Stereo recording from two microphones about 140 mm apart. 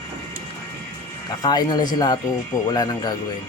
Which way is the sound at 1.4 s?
30° left (ahead or behind).